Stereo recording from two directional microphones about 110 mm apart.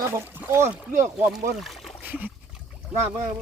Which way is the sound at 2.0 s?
15° right (ahead or behind).